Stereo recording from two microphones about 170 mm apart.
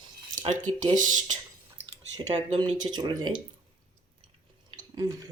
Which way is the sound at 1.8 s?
90° right.